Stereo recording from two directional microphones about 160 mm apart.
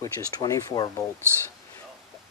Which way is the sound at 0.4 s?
25° left (ahead or behind).